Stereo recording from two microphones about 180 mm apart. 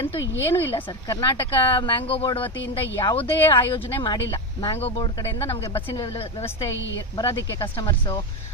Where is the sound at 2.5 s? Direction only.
85° left.